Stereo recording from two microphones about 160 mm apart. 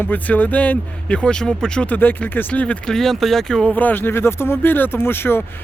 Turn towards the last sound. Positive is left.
turn(degrees=15)  # may be behind; listen again after turning